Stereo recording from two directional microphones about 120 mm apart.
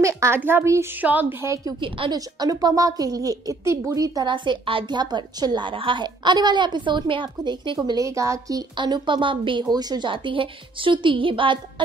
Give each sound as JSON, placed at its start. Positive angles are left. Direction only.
{"t": 0.0, "sound": "a woman's voice", "side_deg": -25}
{"t": 1.5, "sound": "a woman's voice", "side_deg": -30}
{"t": 1.8, "sound": "a woman's voice", "side_deg": -45}
{"t": 2.1, "sound": "a woman's voice", "side_deg": -35}